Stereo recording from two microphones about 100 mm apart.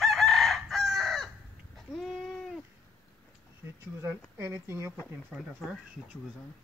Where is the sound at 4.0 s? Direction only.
25° right (ahead or behind).